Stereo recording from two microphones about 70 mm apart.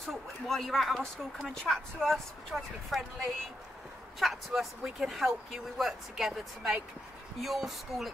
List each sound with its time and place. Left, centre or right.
0.0 s speech: centre
4.2 s speech: centre